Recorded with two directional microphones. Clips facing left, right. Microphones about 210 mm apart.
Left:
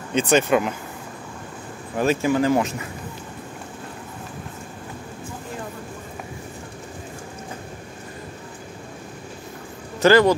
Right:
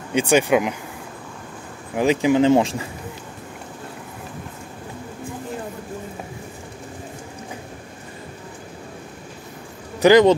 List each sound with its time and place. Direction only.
0.1 s speech: 10° right (ahead or behind)
2.0 s speech: 15° right (ahead or behind)
10.0 s speech: 15° right (ahead or behind)